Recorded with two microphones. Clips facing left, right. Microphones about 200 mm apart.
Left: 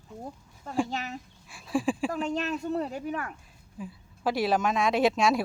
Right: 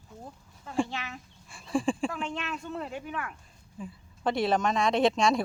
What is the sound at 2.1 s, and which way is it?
Speech, 40° left (ahead or behind).